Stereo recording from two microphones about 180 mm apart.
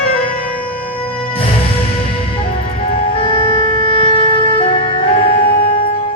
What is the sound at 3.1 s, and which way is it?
Music, 30° left (ahead or behind).